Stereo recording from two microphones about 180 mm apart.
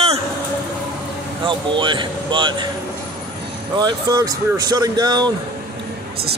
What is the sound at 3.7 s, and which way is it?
Speech, 20° right (ahead or behind).